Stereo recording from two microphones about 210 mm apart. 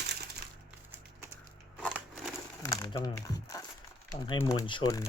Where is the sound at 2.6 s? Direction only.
15° left (ahead or behind).